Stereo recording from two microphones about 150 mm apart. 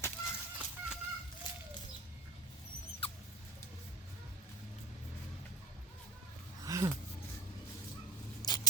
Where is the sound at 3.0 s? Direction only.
40° left (ahead or behind).